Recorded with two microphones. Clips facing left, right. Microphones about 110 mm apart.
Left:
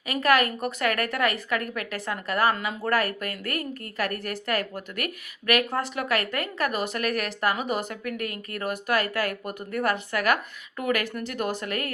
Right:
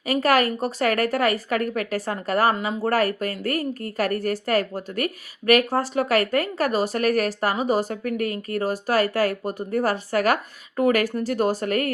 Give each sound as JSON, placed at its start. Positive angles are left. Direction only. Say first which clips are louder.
{"t": 0.1, "sound": "a woman's voice", "louder": "right 3 dB", "side_deg": -35}